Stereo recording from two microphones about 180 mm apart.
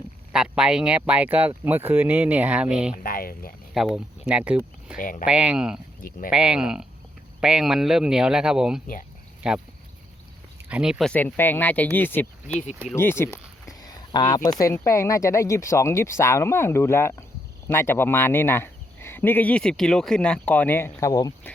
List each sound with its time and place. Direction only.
0.3 s speech: 5° right (ahead or behind)
2.9 s a sound: 50° left (ahead or behind)
3.8 s speech: centre (ahead or behind)
4.9 s speech: 50° left (ahead or behind)
5.2 s speech: 5° right (ahead or behind)
6.0 s speech: 50° left (ahead or behind)
6.3 s speech: 5° right (ahead or behind)
10.7 s speech: 5° right (ahead or behind)
11.1 s speech: 10° left (ahead or behind)
13.0 s a sound: 15° left (ahead or behind)
14.6 s speech: 15° left (ahead or behind)